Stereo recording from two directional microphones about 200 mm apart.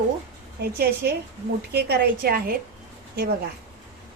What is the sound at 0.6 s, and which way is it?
A woman's voice, 50° right (ahead or behind).